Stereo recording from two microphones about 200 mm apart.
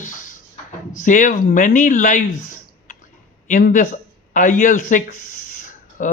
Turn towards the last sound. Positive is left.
turn(degrees=40)  # may be behind; listen again after turning